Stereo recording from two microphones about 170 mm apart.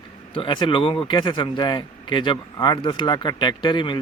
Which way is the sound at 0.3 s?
30° left (ahead or behind).